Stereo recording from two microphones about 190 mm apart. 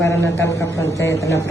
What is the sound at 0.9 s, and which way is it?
Speech, 65° left (ahead or behind).